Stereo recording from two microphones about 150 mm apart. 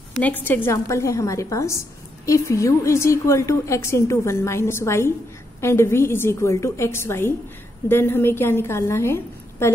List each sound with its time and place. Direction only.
0.2 s a woman's voice: 10° left (ahead or behind)